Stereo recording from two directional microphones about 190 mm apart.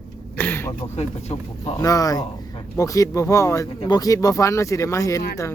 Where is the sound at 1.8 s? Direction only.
20° left (ahead or behind).